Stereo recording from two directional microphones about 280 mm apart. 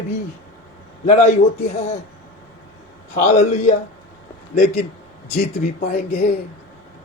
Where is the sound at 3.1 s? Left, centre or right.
Left.